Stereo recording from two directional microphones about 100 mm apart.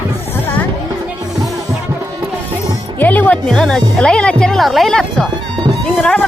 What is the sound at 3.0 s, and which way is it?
Music, 15° left (ahead or behind).